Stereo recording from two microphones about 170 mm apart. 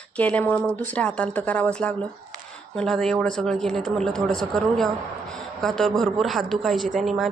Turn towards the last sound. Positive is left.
turn(degrees=0)  # may be behind; listen again after turning